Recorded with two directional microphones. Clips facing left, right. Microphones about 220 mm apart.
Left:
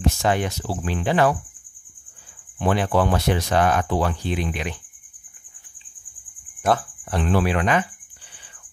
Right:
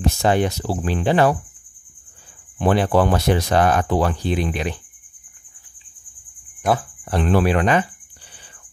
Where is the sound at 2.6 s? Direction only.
40° right (ahead or behind).